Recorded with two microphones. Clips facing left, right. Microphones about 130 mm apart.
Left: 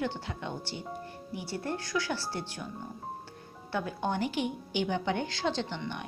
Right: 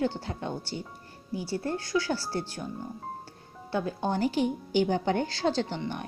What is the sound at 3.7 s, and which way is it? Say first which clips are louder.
A woman's voice: right 3 dB; 35° right (ahead or behind).